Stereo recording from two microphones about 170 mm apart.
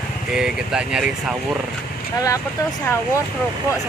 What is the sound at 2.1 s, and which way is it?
Speech, 20° left (ahead or behind).